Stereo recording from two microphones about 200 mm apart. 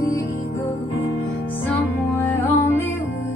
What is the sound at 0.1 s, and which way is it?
Music, 15° left (ahead or behind).